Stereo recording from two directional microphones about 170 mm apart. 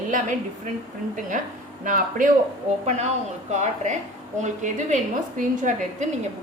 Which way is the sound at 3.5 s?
45° right (ahead or behind).